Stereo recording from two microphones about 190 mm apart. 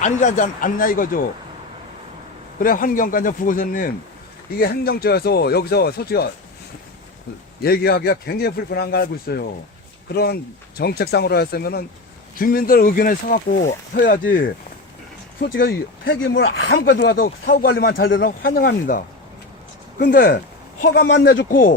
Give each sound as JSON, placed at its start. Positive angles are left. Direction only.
{"t": 0.0, "sound": "speech", "side_deg": 40}
{"t": 2.6, "sound": "speech", "side_deg": 45}
{"t": 7.6, "sound": "speech", "side_deg": 55}
{"t": 16.1, "sound": "speech", "side_deg": 85}